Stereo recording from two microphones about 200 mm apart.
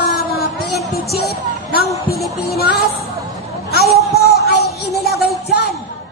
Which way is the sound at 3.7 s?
55° left (ahead or behind).